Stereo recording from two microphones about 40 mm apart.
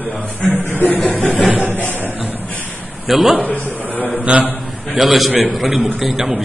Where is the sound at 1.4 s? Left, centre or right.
Right.